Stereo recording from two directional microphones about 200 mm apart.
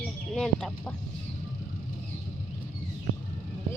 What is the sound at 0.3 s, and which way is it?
Speech, 5° left (ahead or behind).